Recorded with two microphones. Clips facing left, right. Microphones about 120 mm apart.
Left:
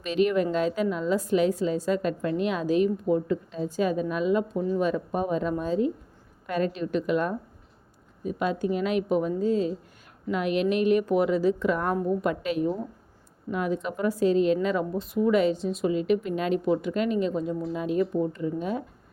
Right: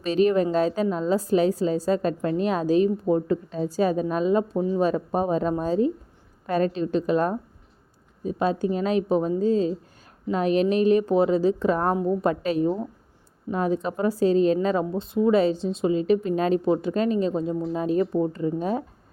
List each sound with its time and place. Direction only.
0.0 s a woman's voice: 35° right (ahead or behind)